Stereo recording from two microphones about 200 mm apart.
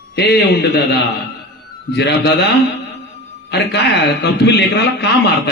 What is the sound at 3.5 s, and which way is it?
A man's voice, 60° left (ahead or behind).